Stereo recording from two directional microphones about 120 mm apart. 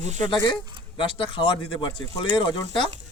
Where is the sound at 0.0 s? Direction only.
75° right (ahead or behind).